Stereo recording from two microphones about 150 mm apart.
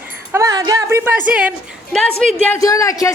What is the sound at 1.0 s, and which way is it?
Speech, 10° right (ahead or behind).